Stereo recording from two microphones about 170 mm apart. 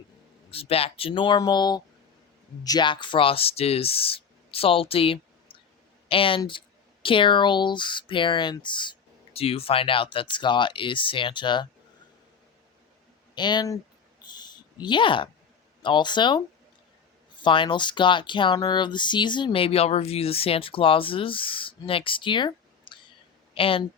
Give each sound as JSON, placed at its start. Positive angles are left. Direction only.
{"t": 0.5, "sound": "speech", "side_deg": 35}
{"t": 13.3, "sound": "speech", "side_deg": 25}
{"t": 14.2, "sound": "a sound", "side_deg": 25}
{"t": 15.8, "sound": "speech", "side_deg": 25}